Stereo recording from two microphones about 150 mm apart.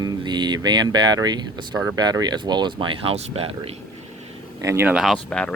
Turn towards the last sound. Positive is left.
turn(degrees=5)  # may be behind; listen again after turning